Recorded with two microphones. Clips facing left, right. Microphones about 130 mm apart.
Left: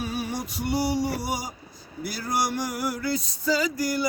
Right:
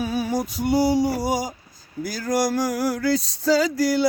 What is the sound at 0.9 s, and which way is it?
Male singing, 90° right.